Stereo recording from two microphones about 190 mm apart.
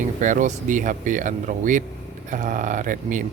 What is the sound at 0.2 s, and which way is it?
Speech, 40° right (ahead or behind).